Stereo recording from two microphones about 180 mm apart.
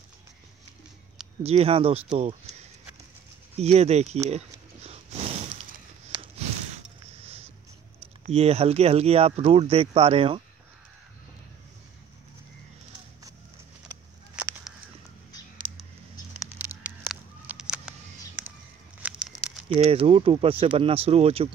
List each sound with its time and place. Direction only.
1.4 s speech: 35° right (ahead or behind)
3.5 s speech: 35° right (ahead or behind)
4.3 s a sound: 35° right (ahead or behind)
8.3 s speech: 35° right (ahead or behind)
16.5 s a sound: 10° right (ahead or behind)
19.0 s crumpling: 5° right (ahead or behind)
19.8 s speech: 35° right (ahead or behind)